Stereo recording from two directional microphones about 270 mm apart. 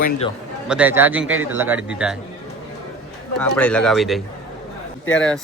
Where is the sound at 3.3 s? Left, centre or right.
Centre.